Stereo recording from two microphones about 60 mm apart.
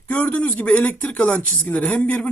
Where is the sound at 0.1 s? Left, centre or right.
Left.